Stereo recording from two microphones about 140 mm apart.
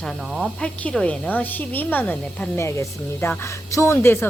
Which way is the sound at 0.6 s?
10° left (ahead or behind).